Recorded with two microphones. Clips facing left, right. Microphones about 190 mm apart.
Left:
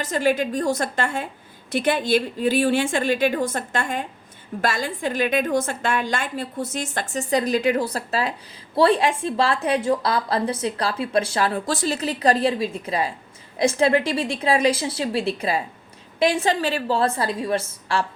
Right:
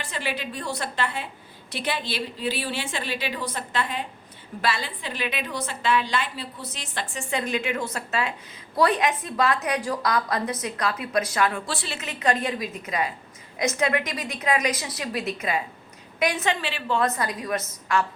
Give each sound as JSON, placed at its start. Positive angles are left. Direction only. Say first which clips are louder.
{"t": 0.0, "sound": "a woman's voice", "louder": "left 10 dB", "side_deg": 45}